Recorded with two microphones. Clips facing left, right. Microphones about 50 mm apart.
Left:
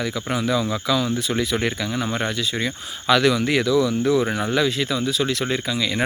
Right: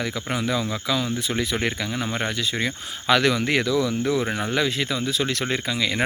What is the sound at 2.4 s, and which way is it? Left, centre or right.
Speech, right.